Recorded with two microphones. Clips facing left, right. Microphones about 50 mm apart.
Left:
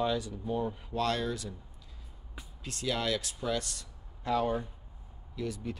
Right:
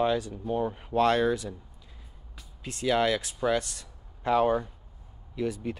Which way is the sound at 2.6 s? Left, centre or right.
Right.